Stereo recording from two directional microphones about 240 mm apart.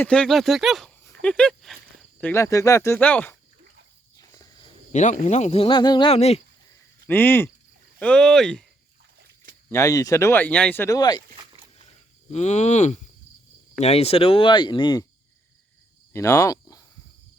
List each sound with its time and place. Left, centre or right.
0.0 s speech: centre
1.0 s a sound: centre
2.3 s speech: centre
4.2 s snake: centre
4.9 s speech: left
7.1 s speech: centre
9.6 s speech: centre
12.3 s speech: left
16.1 s speech: centre